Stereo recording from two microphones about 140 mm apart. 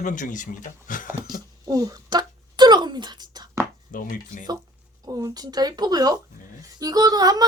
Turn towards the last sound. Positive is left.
turn(degrees=-25)  # may be behind; listen again after turning